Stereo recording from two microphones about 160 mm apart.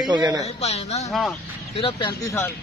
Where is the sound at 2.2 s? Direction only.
15° left (ahead or behind).